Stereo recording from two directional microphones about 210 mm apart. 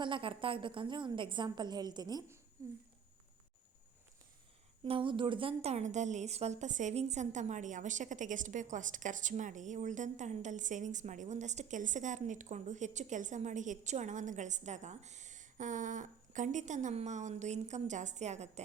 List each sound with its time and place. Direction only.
0.0 s a woman's voice: 25° right (ahead or behind)
4.9 s a woman's voice: 25° right (ahead or behind)